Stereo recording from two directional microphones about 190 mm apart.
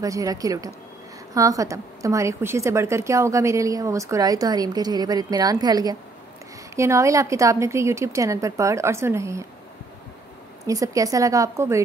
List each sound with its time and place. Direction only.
0.0 s a woman's voice: 20° right (ahead or behind)
10.6 s a woman's voice: 15° right (ahead or behind)